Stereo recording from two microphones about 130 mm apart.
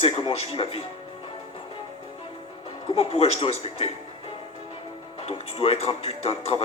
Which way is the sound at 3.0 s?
50° left (ahead or behind).